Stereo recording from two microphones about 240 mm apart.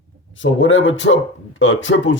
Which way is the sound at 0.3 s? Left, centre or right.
Left.